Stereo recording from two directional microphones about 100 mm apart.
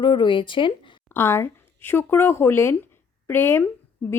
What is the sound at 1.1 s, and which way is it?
A woman's voice, 25° left (ahead or behind).